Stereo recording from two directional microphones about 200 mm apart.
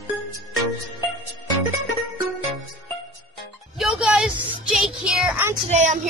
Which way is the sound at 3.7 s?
Centre (ahead or behind).